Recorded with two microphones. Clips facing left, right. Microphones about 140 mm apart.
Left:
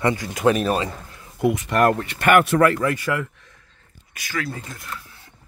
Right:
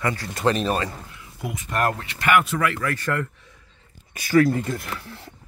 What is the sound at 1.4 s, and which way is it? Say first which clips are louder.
Speech: left 7 dB; 65° left (ahead or behind).